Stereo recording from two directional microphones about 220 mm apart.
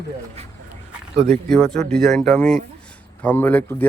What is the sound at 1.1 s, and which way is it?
Speech, 30° right (ahead or behind).